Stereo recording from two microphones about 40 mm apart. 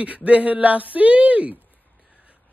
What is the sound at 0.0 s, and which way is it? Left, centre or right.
Speech, right.